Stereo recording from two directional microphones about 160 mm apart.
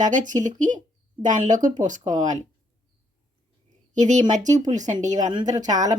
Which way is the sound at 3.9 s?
50° right (ahead or behind).